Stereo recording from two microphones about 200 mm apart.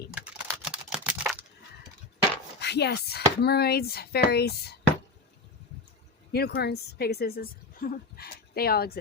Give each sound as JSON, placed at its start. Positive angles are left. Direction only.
{"t": 0.1, "sound": "typing", "side_deg": -5}
{"t": 2.6, "sound": "speech", "side_deg": 55}
{"t": 6.3, "sound": "speech", "side_deg": 55}